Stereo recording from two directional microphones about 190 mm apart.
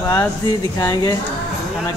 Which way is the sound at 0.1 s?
20° left (ahead or behind).